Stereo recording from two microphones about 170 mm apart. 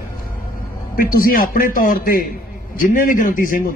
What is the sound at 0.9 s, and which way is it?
A man's voice, 55° left (ahead or behind).